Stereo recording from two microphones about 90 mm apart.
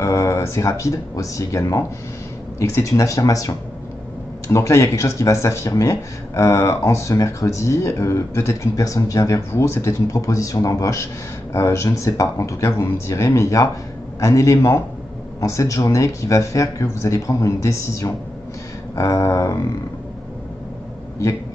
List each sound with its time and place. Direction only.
0.0 s speech: 35° left (ahead or behind)